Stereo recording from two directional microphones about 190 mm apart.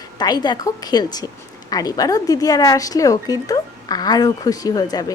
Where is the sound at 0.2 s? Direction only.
20° left (ahead or behind).